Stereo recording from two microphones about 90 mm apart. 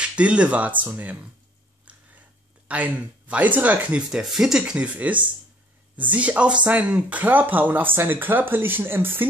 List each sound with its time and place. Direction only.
0.0 s speech: 15° right (ahead or behind)
1.9 s a sound: 15° right (ahead or behind)
2.7 s speech: 15° right (ahead or behind)